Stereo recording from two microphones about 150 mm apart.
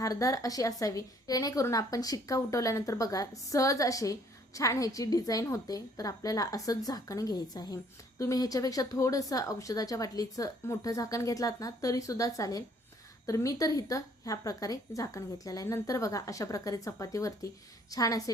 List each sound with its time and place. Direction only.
0.0 s a woman's voice: 20° left (ahead or behind)